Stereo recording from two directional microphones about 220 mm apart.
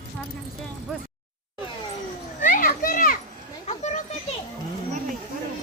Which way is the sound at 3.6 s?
30° left (ahead or behind).